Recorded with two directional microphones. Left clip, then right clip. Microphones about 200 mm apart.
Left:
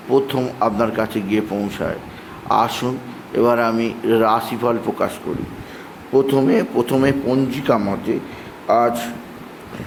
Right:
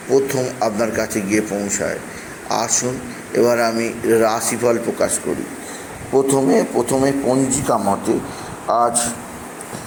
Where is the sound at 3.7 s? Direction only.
20° left (ahead or behind).